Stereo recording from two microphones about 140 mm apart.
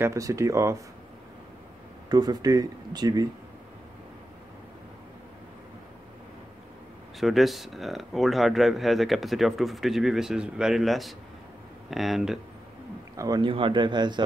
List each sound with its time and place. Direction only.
0.0 s speech: 20° right (ahead or behind)
2.0 s speech: 30° right (ahead or behind)
7.2 s speech: centre (ahead or behind)
13.1 s a man's voice: 25° right (ahead or behind)
13.5 s speech: 35° right (ahead or behind)